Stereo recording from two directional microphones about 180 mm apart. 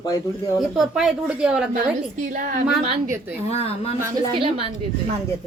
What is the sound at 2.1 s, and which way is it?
Speech, 45° right (ahead or behind).